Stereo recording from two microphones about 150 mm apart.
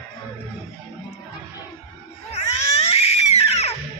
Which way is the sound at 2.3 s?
45° left (ahead or behind).